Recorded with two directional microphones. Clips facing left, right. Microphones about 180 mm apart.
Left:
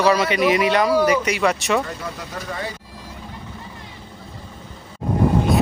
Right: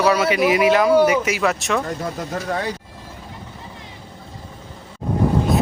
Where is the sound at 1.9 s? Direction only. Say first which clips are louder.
Right 5 dB; 45° right (ahead or behind).